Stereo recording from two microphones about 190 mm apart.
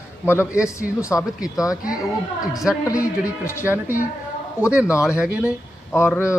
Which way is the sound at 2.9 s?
15° left (ahead or behind).